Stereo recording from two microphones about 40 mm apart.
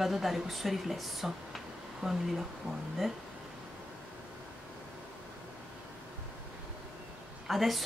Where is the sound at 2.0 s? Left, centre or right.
Centre.